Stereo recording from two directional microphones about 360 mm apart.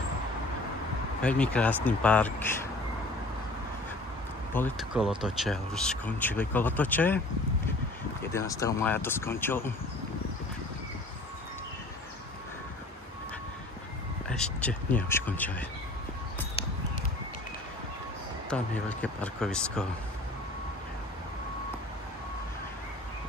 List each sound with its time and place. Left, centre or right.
1.2 s speech: centre
4.6 s speech: centre
8.2 s speech: centre
14.2 s speech: centre
18.5 s speech: centre